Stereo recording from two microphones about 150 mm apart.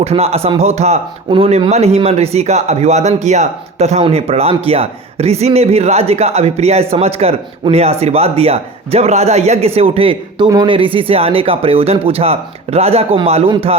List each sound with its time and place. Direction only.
0.0 s speech: 40° right (ahead or behind)